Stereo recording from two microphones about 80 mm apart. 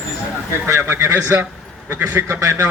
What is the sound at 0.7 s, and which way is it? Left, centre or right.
Speech, right.